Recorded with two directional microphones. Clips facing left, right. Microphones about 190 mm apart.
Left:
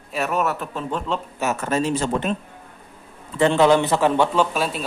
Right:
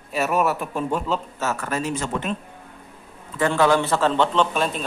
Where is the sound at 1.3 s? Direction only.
20° left (ahead or behind).